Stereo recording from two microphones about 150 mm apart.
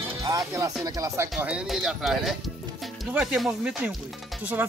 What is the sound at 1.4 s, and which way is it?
Speech, 5° right (ahead or behind).